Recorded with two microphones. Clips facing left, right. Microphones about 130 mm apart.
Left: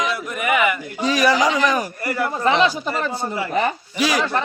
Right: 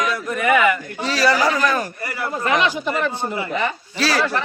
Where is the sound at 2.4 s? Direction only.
30° left (ahead or behind).